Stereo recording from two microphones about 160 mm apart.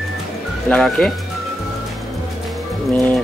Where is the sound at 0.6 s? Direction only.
5° left (ahead or behind).